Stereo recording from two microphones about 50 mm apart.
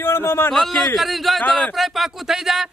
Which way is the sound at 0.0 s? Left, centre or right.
Left.